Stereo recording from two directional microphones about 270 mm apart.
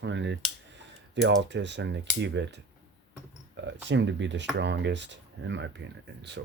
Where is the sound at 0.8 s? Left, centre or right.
Right.